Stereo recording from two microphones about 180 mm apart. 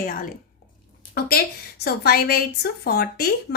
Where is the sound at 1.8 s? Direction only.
60° left (ahead or behind).